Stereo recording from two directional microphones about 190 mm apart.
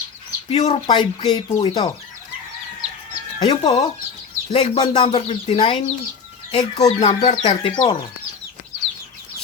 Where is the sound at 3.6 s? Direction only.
35° left (ahead or behind).